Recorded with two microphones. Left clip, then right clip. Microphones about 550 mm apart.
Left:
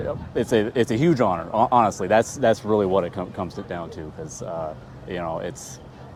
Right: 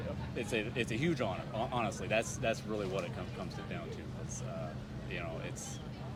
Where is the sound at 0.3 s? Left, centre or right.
Left.